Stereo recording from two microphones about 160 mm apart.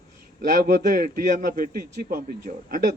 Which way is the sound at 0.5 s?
60° right (ahead or behind).